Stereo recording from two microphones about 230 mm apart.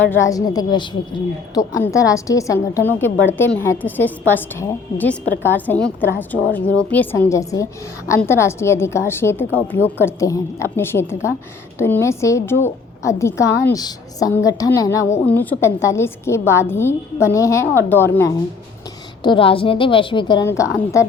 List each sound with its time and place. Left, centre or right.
0.1 s a woman's voice: centre
19.2 s a woman's voice: left